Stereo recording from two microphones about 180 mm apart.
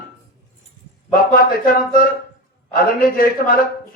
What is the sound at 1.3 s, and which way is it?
A man's voice, 55° left (ahead or behind).